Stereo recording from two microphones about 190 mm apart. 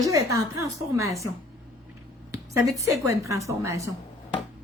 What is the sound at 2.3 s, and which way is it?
Speech, 15° right (ahead or behind).